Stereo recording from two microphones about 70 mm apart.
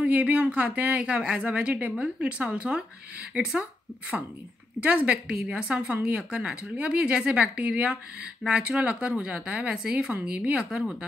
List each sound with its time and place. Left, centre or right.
0.0 s a woman's voice: right
4.8 s speech: centre